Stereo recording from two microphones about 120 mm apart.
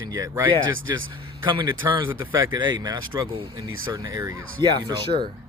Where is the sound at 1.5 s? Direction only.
40° right (ahead or behind).